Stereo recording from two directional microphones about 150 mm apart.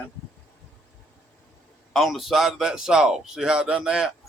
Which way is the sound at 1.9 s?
Centre (ahead or behind).